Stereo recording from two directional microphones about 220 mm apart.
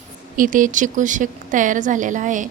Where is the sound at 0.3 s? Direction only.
35° right (ahead or behind).